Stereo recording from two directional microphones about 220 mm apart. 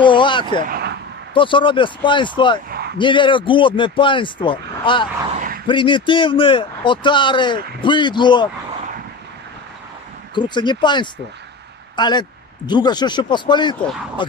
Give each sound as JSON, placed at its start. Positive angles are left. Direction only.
{"t": 0.0, "sound": "speech", "side_deg": 20}
{"t": 0.7, "sound": "a sound", "side_deg": -45}
{"t": 1.3, "sound": "a man's voice", "side_deg": 20}
{"t": 10.3, "sound": "a man's voice", "side_deg": 20}